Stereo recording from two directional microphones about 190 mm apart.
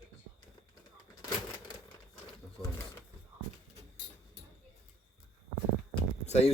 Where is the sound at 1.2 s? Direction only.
20° left (ahead or behind).